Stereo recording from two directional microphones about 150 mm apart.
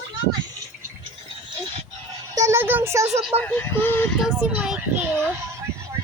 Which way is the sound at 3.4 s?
15° left (ahead or behind).